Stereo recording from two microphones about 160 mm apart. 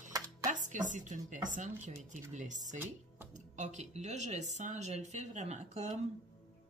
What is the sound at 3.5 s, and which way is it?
Speech, 45° right (ahead or behind).